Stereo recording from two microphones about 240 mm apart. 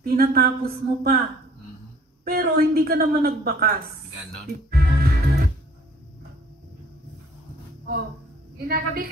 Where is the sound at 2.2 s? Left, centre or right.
Right.